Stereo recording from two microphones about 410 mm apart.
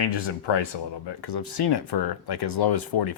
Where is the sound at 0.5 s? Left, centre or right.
Left.